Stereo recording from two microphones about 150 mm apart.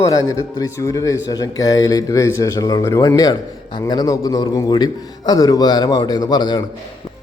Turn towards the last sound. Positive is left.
turn(degrees=30)  # may be behind; listen again after turning